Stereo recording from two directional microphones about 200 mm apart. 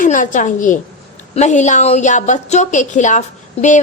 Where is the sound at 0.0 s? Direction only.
40° left (ahead or behind).